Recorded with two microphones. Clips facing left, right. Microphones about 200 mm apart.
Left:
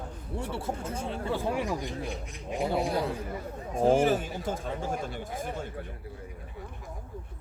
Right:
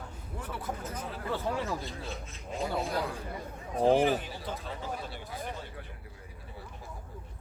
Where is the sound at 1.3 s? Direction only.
15° left (ahead or behind).